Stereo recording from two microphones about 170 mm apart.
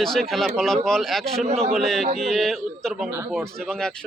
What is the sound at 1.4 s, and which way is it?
Speech, 40° right (ahead or behind).